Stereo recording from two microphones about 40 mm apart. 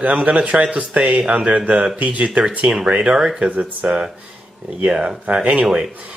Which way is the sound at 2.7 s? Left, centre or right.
Right.